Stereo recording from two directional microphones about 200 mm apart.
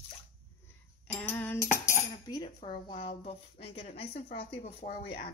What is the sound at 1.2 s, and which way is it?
Cutlery, 10° left (ahead or behind).